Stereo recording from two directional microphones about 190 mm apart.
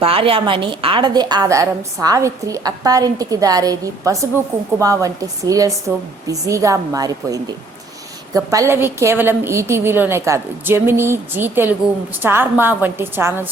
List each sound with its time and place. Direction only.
0.0 s a woman's voice: 30° right (ahead or behind); by 13.5 s 10° right (ahead or behind)